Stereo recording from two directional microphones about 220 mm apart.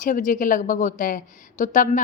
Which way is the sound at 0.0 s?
35° left (ahead or behind).